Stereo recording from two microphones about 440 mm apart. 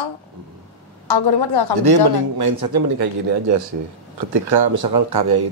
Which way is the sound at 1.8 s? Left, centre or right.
Right.